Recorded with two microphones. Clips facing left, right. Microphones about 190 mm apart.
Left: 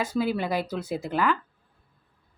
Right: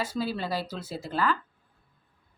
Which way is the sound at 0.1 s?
15° left (ahead or behind).